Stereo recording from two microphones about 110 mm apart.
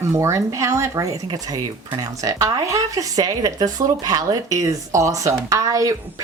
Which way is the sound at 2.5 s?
30° right (ahead or behind).